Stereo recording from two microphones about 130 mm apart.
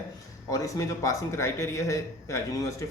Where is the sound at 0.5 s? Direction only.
25° left (ahead or behind).